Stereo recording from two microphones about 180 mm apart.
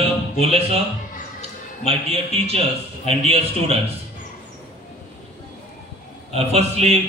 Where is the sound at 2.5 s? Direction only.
35° right (ahead or behind).